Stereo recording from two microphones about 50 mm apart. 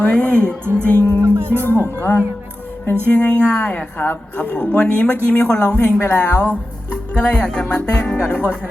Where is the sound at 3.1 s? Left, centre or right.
Left.